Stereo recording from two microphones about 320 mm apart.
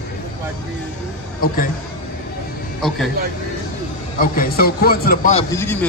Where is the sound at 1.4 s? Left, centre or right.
Left.